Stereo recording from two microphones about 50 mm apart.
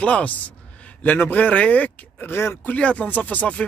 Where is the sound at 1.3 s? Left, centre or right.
Left.